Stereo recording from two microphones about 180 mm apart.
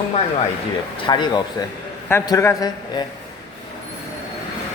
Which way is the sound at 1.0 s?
25° left (ahead or behind).